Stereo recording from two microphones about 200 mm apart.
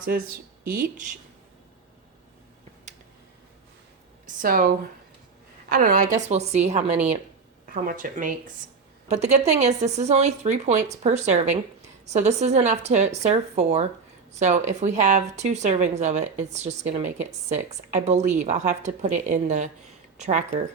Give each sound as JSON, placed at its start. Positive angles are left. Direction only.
{"t": 0.6, "sound": "speech", "side_deg": -45}
{"t": 4.4, "sound": "a woman's voice", "side_deg": -45}
{"t": 6.9, "sound": "a woman's voice", "side_deg": -10}
{"t": 7.7, "sound": "a woman's voice", "side_deg": -45}